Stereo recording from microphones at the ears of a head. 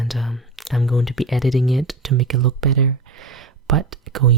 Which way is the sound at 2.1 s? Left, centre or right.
Right.